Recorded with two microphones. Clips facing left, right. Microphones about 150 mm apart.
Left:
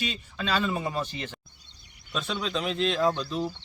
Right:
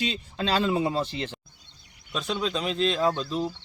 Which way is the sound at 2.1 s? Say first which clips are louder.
Right 2 dB; centre (ahead or behind).